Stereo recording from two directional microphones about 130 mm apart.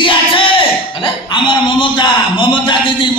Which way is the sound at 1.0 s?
40° left (ahead or behind).